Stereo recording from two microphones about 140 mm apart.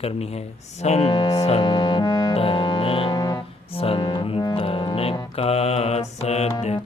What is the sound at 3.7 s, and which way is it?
Speech, 45° left (ahead or behind).